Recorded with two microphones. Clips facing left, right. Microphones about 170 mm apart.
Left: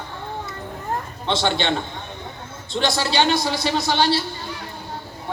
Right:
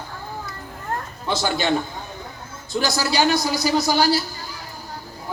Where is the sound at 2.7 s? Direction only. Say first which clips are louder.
Left 1 dB; 25° left (ahead or behind).